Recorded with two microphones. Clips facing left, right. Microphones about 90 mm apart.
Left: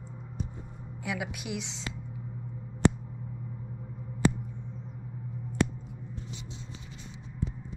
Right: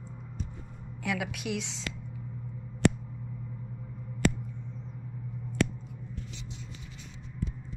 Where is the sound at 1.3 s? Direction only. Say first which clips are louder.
Right 2 dB; 10° left (ahead or behind).